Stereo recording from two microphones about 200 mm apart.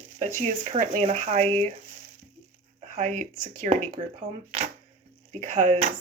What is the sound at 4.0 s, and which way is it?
Speech, 30° right (ahead or behind).